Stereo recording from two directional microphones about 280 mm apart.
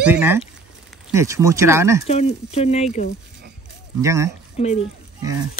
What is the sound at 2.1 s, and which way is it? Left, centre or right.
Speech, left.